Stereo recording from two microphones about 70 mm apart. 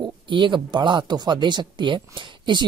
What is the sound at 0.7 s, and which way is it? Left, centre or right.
Speech, right.